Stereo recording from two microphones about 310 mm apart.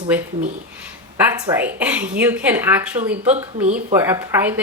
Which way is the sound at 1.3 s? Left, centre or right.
Centre.